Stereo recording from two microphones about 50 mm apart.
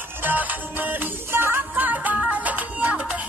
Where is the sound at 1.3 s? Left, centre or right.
Right.